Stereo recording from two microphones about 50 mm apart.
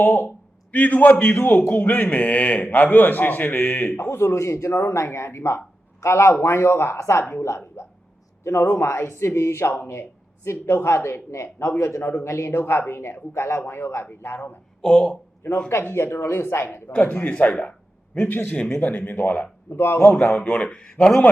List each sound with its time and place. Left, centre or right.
0.0 s a man's voice: left
1.4 s a man's voice: left
4.1 s speech: left
6.4 s speech: left
7.0 s speech: left
7.8 s speech: left
14.8 s speech: centre
15.4 s speech: left
15.9 s speech: left
16.9 s a man's voice: left
17.5 s a sound: left
18.2 s a man's voice: left
19.7 s speech: left
20.2 s a man's voice: left; by 21.2 s centre